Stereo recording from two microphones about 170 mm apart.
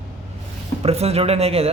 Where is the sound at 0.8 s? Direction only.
40° right (ahead or behind).